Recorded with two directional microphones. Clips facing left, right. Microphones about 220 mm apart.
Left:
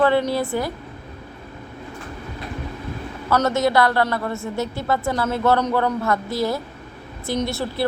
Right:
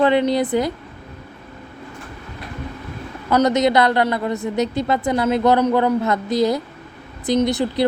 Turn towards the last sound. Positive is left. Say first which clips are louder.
# right 6 dB
turn(degrees=-20)  # may be behind; listen again after turning